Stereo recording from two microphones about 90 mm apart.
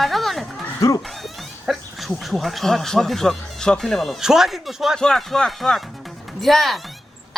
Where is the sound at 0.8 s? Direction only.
40° left (ahead or behind).